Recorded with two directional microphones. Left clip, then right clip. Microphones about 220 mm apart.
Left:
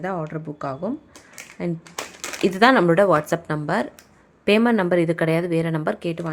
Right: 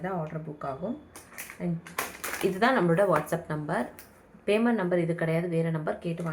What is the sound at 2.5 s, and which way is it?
Speech, 45° left (ahead or behind).